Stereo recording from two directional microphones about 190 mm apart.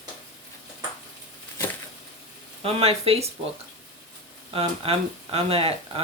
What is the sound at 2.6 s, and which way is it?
Speech, 30° right (ahead or behind).